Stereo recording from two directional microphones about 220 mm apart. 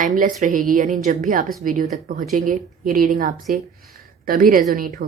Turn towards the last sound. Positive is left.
turn(degrees=-40)  # may be behind; listen again after turning